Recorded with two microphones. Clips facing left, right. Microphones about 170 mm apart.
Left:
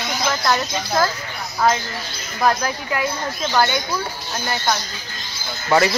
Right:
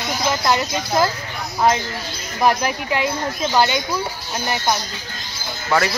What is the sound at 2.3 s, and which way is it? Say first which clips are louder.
Speech: right 1 dB; 20° right (ahead or behind).